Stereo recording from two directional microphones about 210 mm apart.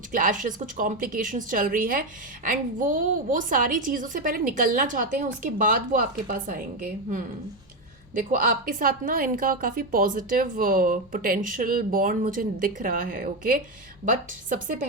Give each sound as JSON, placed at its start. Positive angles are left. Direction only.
{"t": 0.1, "sound": "a woman's voice", "side_deg": -40}